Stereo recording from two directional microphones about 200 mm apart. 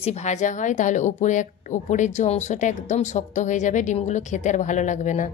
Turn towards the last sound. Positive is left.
turn(degrees=40)  # may be behind; listen again after turning